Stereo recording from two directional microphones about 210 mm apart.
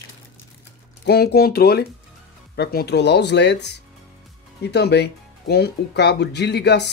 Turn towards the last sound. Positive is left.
turn(degrees=55)  # may be behind; listen again after turning